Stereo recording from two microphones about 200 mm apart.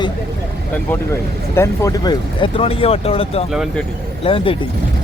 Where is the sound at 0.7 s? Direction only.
10° left (ahead or behind); by 3.4 s 30° left (ahead or behind).